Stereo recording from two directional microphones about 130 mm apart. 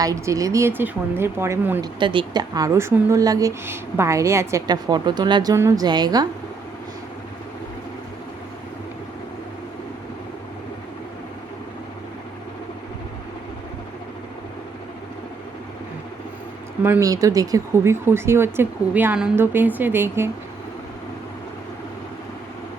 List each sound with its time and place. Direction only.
0.0 s a woman's voice: 25° right (ahead or behind)
1.8 s a woman's voice: 40° right (ahead or behind)
17.0 s a woman's voice: 25° right (ahead or behind)